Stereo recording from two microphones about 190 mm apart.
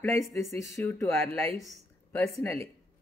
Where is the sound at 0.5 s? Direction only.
15° left (ahead or behind).